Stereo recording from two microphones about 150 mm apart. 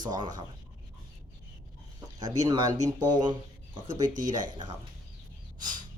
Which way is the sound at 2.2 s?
25° right (ahead or behind).